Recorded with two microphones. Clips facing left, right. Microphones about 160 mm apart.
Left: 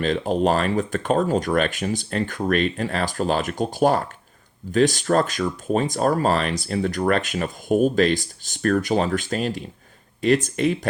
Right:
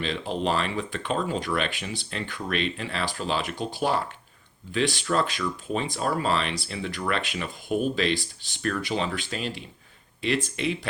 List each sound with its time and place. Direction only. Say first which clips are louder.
0.0 s speech: left 7 dB; 45° left (ahead or behind)